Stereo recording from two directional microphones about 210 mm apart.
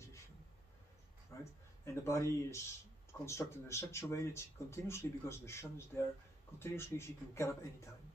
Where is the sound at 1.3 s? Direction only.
15° left (ahead or behind).